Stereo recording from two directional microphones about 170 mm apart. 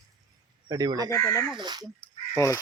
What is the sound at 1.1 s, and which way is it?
Speech, 20° left (ahead or behind).